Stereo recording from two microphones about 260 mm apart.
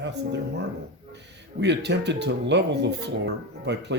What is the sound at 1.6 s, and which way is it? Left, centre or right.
Speech, right.